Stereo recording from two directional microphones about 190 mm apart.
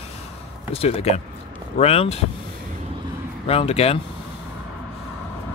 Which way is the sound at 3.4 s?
30° left (ahead or behind).